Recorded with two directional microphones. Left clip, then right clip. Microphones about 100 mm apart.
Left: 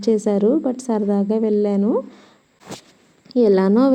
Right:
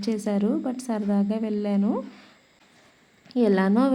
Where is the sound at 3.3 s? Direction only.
40° left (ahead or behind).